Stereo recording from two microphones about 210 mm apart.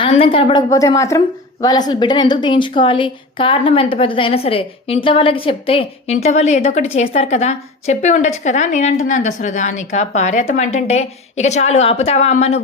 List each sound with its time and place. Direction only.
0.0 s a woman's voice: 25° left (ahead or behind)